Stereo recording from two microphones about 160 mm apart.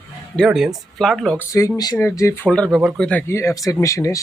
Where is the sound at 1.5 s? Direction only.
20° left (ahead or behind).